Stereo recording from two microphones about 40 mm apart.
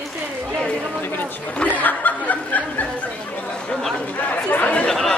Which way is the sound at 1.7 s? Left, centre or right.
Left.